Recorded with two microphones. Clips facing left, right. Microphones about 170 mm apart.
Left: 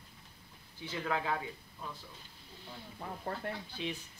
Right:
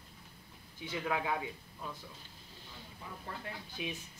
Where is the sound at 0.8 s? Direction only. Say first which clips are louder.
Even; 15° right (ahead or behind).